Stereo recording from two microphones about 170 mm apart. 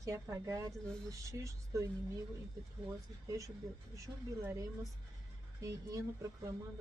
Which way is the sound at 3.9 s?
15° right (ahead or behind).